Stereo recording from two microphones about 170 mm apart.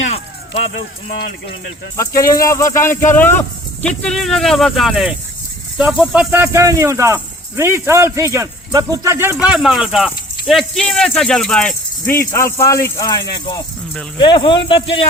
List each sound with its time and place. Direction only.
2.0 s speech: 20° left (ahead or behind); by 11.7 s 5° left (ahead or behind)
12.1 s speech: 15° left (ahead or behind)